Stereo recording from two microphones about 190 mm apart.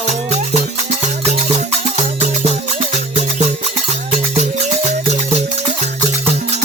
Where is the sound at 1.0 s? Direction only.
40° right (ahead or behind).